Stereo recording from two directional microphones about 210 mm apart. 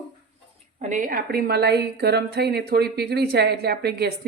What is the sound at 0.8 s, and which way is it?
A woman's voice, 35° right (ahead or behind).